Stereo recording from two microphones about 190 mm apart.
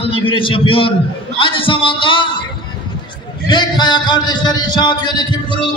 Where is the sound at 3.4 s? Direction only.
20° left (ahead or behind).